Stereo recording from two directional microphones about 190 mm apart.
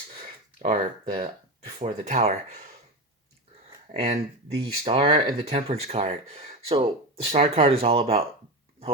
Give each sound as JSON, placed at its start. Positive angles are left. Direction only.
{"t": 0.6, "sound": "speech", "side_deg": -40}
{"t": 3.9, "sound": "speech", "side_deg": -35}
{"t": 4.5, "sound": "speech", "side_deg": -20}